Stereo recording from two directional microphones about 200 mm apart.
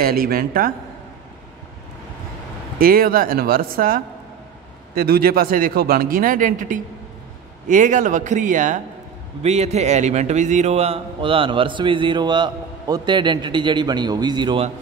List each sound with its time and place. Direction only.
0.0 s a man's voice: 45° right (ahead or behind)
2.8 s a man's voice: 45° right (ahead or behind); by 14.7 s 25° right (ahead or behind)